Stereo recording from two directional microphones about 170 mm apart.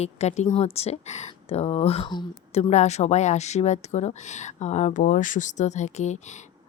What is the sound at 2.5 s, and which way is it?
Speech, 40° left (ahead or behind).